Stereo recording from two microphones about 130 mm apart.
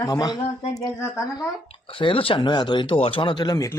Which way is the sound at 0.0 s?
30° left (ahead or behind).